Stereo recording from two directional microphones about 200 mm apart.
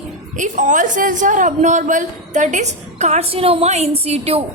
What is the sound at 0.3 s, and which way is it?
A woman's voice, 40° right (ahead or behind).